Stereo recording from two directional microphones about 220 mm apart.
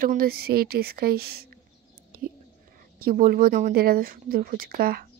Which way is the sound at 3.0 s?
40° right (ahead or behind).